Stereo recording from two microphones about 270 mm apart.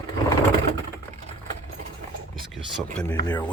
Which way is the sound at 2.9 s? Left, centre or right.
Centre.